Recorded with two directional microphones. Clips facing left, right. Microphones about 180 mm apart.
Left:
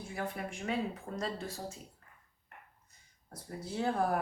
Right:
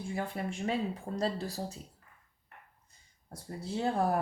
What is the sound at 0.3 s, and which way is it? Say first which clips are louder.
Speech: right 3 dB; 30° right (ahead or behind).